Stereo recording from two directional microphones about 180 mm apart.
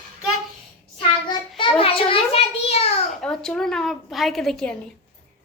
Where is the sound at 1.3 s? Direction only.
25° left (ahead or behind).